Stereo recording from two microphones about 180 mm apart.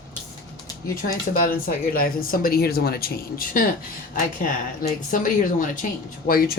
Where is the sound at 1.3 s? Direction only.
50° left (ahead or behind).